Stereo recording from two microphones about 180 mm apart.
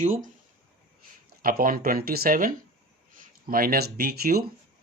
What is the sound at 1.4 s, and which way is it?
Speech, 55° right (ahead or behind).